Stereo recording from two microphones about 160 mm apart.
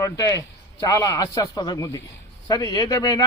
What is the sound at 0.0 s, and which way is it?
A man's voice, 20° left (ahead or behind).